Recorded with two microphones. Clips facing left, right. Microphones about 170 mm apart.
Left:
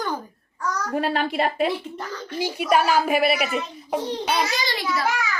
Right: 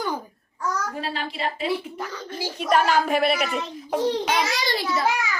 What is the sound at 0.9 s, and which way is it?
Speech, 60° left (ahead or behind).